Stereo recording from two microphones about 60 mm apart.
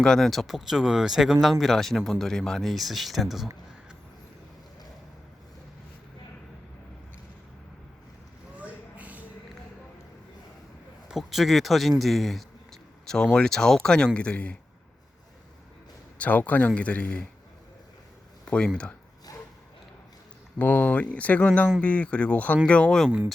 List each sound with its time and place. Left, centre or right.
0.0 s speech: centre
8.5 s a sound: right
11.1 s speech: centre
16.1 s speech: left
18.4 s speech: centre
19.3 s a sound: left
20.6 s speech: left